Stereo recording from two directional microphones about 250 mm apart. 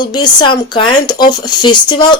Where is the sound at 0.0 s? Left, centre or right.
Centre.